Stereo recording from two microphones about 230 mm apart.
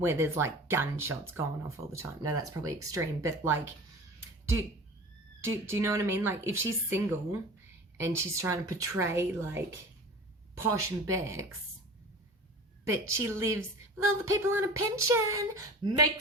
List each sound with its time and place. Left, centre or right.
0.0 s a woman's voice: centre
5.4 s a woman's voice: centre
12.9 s a woman's voice: centre